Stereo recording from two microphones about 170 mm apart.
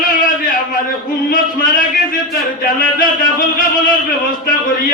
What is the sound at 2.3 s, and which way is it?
A man's voice, 55° left (ahead or behind).